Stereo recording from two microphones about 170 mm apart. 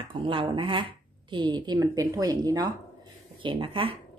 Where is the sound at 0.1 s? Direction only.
30° right (ahead or behind).